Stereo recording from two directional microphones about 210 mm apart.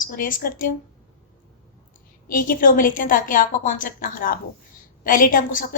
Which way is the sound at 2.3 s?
40° left (ahead or behind).